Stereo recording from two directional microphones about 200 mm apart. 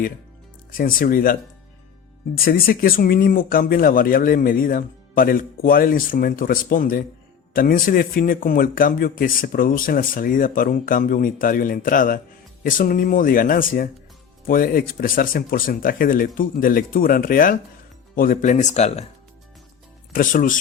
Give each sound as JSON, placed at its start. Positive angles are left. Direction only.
{"t": 0.7, "sound": "speech", "side_deg": 45}
{"t": 20.1, "sound": "speech", "side_deg": 40}